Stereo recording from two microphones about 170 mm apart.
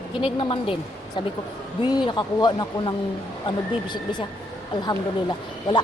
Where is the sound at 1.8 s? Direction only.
25° left (ahead or behind).